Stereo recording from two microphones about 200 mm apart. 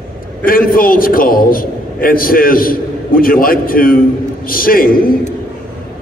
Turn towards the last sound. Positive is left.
turn(degrees=45)  # may be behind; listen again after turning